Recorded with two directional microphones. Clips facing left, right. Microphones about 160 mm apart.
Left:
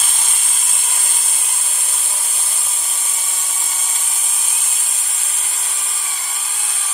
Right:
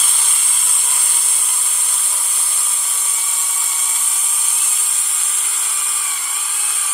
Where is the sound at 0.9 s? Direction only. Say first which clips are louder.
Even; 45° left (ahead or behind).